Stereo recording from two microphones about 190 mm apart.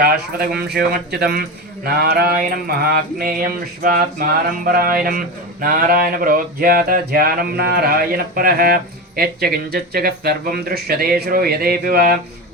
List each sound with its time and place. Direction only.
0.0 s a man's voice: 50° right (ahead or behind)